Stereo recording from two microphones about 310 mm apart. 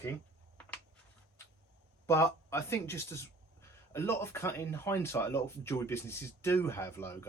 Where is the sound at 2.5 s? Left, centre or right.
Centre.